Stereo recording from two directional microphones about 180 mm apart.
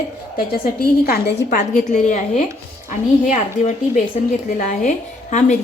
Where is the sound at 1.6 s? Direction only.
40° left (ahead or behind).